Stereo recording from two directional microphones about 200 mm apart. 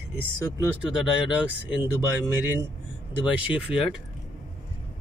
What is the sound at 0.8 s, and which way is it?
Speech, 5° right (ahead or behind).